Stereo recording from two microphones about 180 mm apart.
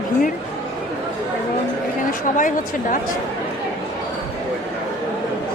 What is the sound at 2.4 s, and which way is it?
Speech, 45° left (ahead or behind).